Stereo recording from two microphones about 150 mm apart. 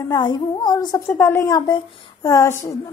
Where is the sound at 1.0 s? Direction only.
15° left (ahead or behind).